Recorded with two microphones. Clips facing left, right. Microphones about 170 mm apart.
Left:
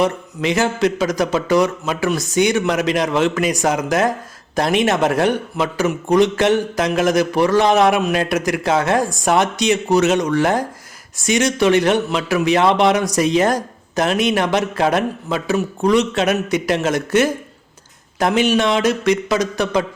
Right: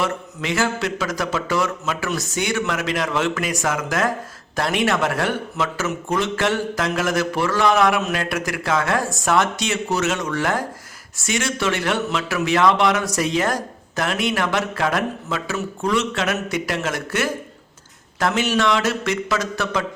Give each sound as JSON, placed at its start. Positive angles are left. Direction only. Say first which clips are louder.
{"t": 0.0, "sound": "speech", "louder": "left 6 dB", "side_deg": 20}